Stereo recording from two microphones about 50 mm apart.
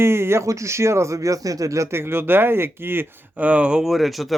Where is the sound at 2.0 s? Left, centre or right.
Right.